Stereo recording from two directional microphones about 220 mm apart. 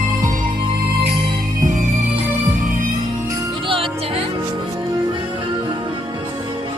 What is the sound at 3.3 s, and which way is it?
Music, 25° right (ahead or behind).